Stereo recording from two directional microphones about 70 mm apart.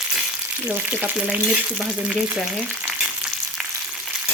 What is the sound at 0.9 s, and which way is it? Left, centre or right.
Frying, right.